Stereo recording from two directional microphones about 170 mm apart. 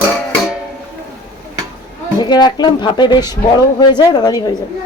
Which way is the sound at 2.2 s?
25° left (ahead or behind).